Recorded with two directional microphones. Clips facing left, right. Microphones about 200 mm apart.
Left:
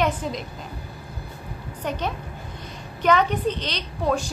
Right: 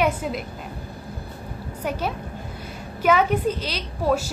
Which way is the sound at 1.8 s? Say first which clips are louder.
Right 1 dB; 5° right (ahead or behind).